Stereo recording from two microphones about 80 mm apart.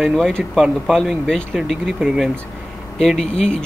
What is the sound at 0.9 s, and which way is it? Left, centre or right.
Speech, centre.